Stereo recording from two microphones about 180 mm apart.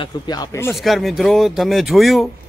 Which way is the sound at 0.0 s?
20° left (ahead or behind).